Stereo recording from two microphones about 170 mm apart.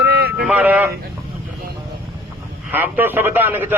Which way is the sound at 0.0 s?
65° right (ahead or behind).